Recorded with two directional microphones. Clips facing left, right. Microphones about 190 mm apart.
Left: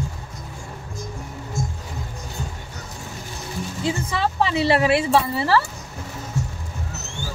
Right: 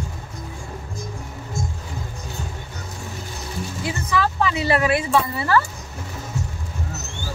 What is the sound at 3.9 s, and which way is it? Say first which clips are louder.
A woman's voice: even; 30° left (ahead or behind).